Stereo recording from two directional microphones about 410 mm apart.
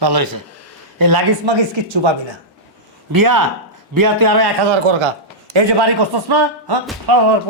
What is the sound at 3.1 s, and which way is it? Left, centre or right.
A man's voice, right.